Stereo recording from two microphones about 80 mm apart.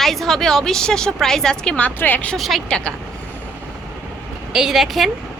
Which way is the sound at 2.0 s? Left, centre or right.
Left.